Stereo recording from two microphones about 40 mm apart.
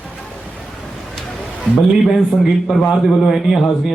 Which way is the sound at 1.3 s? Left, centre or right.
Centre.